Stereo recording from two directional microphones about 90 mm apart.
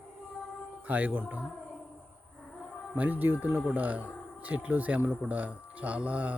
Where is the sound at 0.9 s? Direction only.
20° right (ahead or behind).